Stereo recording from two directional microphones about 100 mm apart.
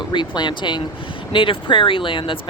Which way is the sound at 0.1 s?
50° left (ahead or behind).